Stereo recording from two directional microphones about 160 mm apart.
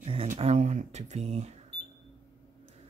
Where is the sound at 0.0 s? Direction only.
35° right (ahead or behind).